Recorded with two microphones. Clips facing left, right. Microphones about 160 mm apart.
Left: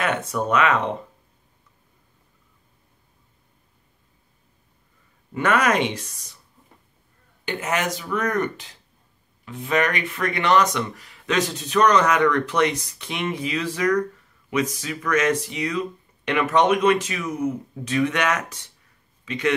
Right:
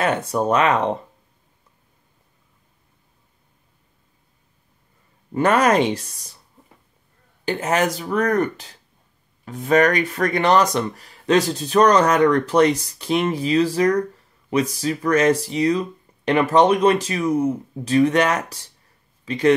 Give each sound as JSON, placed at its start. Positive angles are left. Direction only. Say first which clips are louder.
{"t": 0.0, "sound": "speech", "louder": "right 4 dB", "side_deg": -35}
{"t": 5.3, "sound": "speech", "louder": "right 4 dB", "side_deg": -35}
{"t": 7.4, "sound": "speech", "louder": "right 5 dB", "side_deg": -35}